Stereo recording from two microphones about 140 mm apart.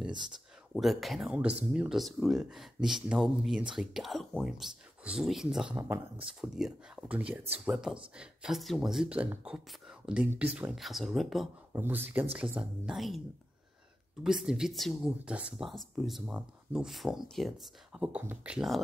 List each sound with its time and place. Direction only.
0.7 s speech: centre (ahead or behind)
11.7 s speech: 15° right (ahead or behind); by 13.2 s centre (ahead or behind)
14.2 s speech: 5° right (ahead or behind)